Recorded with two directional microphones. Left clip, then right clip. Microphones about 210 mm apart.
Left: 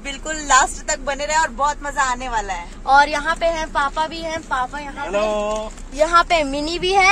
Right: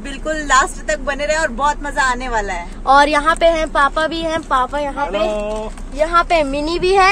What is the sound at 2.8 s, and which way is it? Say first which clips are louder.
A woman's voice: right 3 dB; 30° right (ahead or behind).